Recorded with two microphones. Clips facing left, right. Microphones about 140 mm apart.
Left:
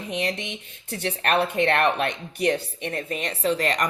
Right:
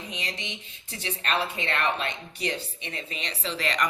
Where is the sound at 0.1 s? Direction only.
55° left (ahead or behind).